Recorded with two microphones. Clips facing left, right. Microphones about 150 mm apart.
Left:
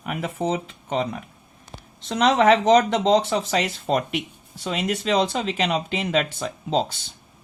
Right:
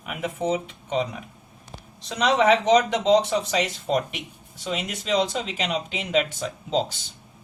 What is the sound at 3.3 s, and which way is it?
Speech, 60° left (ahead or behind).